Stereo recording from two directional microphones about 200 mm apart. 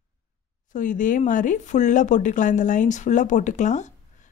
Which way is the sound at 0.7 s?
40° left (ahead or behind).